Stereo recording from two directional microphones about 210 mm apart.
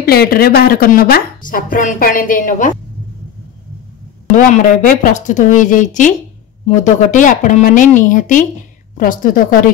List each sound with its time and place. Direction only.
0.0 s a woman's voice: 45° left (ahead or behind)
4.4 s speech: 40° left (ahead or behind)